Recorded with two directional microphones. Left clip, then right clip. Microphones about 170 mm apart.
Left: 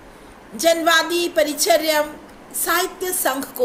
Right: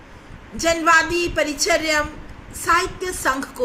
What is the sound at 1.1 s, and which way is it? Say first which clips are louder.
Speech: left 2 dB; centre (ahead or behind).